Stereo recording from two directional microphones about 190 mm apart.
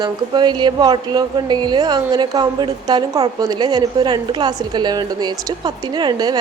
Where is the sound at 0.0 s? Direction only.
25° right (ahead or behind).